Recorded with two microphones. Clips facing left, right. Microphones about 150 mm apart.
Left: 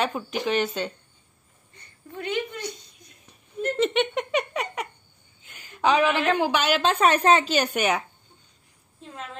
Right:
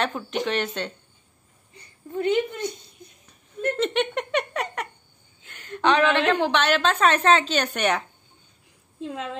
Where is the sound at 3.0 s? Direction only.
25° right (ahead or behind).